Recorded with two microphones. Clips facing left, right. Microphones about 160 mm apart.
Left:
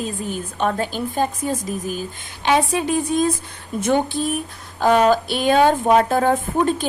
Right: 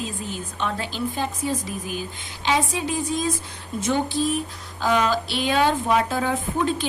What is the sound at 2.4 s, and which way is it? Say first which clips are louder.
Speech: left 5 dB; 60° left (ahead or behind).